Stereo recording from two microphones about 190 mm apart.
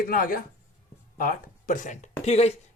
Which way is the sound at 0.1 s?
50° left (ahead or behind).